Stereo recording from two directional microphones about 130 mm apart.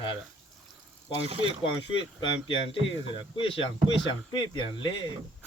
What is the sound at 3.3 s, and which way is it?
Speech, 45° left (ahead or behind).